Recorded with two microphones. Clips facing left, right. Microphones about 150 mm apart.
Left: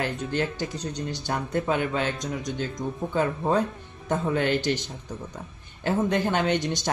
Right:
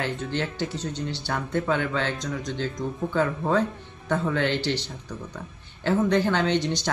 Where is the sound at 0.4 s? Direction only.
15° left (ahead or behind).